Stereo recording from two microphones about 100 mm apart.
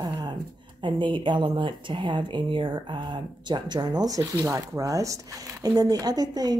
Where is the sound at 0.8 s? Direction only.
55° right (ahead or behind).